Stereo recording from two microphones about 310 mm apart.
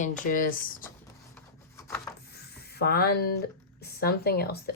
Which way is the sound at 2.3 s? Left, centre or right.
Left.